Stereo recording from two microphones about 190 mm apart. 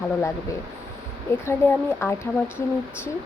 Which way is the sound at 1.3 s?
15° left (ahead or behind).